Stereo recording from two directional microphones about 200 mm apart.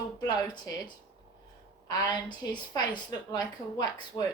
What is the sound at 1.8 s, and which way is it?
A woman's voice, 20° left (ahead or behind).